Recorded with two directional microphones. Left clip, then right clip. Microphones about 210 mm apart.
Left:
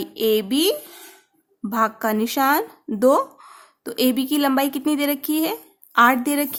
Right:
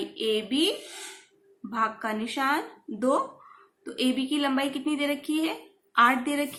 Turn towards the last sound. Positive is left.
turn(degrees=55)  # may be behind; listen again after turning